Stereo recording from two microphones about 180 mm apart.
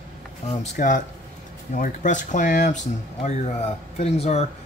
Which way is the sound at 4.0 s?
35° left (ahead or behind).